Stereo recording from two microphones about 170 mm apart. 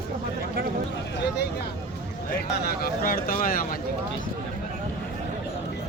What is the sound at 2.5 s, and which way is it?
Speech, 60° left (ahead or behind).